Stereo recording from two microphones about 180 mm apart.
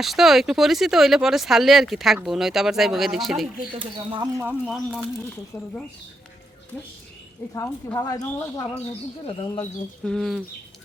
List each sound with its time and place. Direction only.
0.0 s speech: centre (ahead or behind)
3.8 s speech: 30° right (ahead or behind)
4.4 s speech: 10° right (ahead or behind)
5.5 s speech: 15° left (ahead or behind)
7.5 s a woman's voice: 15° left (ahead or behind)
9.6 s speech: 5° left (ahead or behind)